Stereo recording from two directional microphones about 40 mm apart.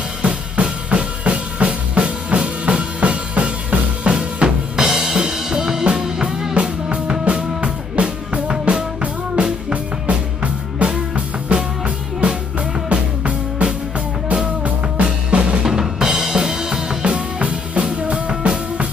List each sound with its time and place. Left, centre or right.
0.2 s drum: right
4.0 s music: right
4.7 s music: centre
15.6 s drum kit: centre